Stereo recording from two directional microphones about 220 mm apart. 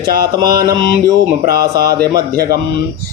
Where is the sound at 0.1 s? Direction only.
45° right (ahead or behind).